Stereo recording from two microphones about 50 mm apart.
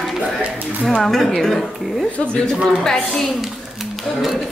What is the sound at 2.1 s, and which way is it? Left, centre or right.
Speech, centre.